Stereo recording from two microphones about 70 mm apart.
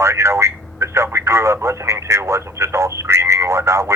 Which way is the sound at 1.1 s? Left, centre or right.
Right.